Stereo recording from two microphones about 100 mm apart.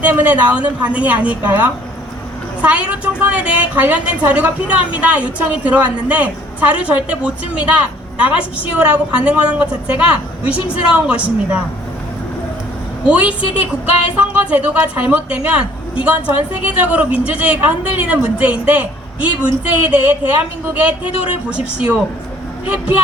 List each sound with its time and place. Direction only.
0.0 s a woman's voice: 15° right (ahead or behind)
13.1 s a woman's voice: 15° right (ahead or behind)
21.5 s a woman's voice: 10° right (ahead or behind)